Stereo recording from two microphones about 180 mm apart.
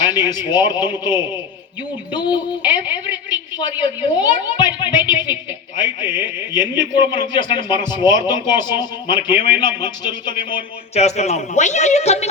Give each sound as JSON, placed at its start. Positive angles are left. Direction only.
{"t": 0.0, "sound": "a woman's voice", "side_deg": 20}
{"t": 10.9, "sound": "a man's voice", "side_deg": 40}